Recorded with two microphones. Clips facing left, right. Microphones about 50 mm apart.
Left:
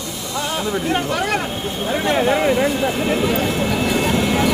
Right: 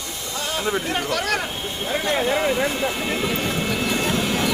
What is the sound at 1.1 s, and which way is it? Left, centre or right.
Speech, left.